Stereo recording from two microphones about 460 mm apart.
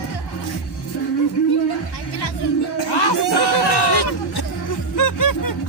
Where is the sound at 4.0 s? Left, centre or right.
Left.